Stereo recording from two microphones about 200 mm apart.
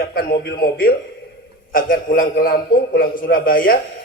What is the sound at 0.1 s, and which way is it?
A man's voice, 50° left (ahead or behind).